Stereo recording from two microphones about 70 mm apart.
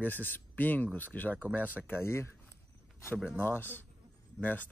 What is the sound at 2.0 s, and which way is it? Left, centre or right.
Speech, left.